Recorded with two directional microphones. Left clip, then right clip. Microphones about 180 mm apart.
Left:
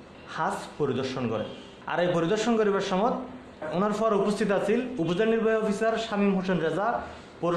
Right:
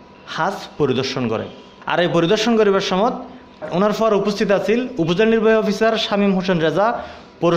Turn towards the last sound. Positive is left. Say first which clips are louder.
# right 10 dB
turn(degrees=-40)  # may be behind; listen again after turning